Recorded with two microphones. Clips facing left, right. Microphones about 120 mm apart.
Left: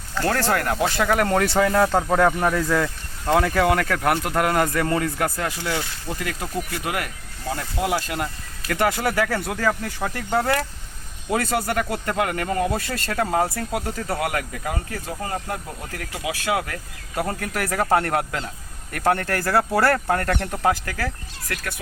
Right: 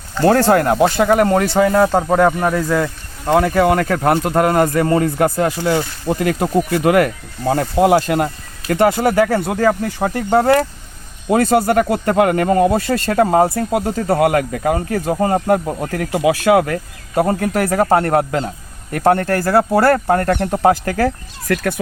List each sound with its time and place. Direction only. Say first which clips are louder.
0.1 s speech: right 10 dB; 25° right (ahead or behind)
5.5 s speech: right 9 dB; 45° right (ahead or behind)
8.6 s speech: right 8 dB; 20° right (ahead or behind)
10.3 s speech: right 9 dB; 45° right (ahead or behind)
14.2 s speech: right 11 dB; 50° right (ahead or behind)
14.8 s speech: right 11 dB; 45° right (ahead or behind)
15.0 s speech: right 15 dB; 55° right (ahead or behind)
16.7 s speech: right 10 dB; 35° right (ahead or behind)
18.4 s speech: right 8 dB; 25° right (ahead or behind)
20.4 s speech: right 8 dB; 35° right (ahead or behind)
21.4 s speech: right 13 dB; 55° right (ahead or behind)